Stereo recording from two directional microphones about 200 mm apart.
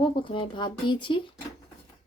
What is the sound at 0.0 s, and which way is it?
Speech, 25° left (ahead or behind).